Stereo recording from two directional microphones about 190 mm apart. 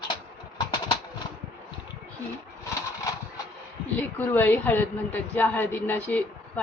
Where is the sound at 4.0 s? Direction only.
10° left (ahead or behind).